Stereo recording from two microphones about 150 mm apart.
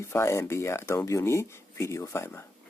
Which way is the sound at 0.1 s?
15° left (ahead or behind).